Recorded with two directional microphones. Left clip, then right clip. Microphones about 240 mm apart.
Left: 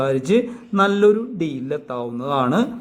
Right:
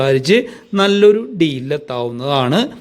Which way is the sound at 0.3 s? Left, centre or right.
Right.